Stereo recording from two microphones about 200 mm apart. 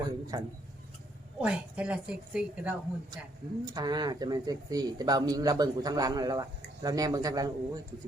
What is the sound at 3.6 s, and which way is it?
A man's voice, 20° right (ahead or behind).